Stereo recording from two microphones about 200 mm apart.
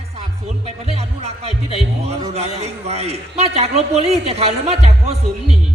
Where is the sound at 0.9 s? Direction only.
30° right (ahead or behind).